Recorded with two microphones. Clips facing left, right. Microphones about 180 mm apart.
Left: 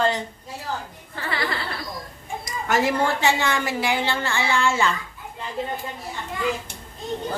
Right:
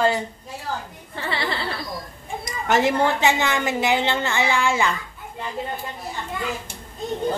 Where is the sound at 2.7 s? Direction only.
20° right (ahead or behind).